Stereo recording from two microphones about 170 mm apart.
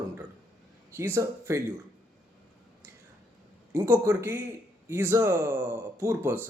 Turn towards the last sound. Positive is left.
turn(degrees=-15)  # may be behind; listen again after turning